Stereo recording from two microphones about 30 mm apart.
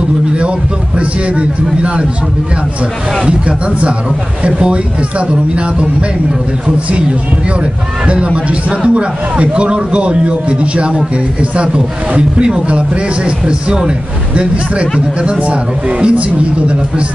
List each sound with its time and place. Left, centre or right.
0.9 s a man's voice: right
3.3 s a man's voice: right
8.5 s a man's voice: right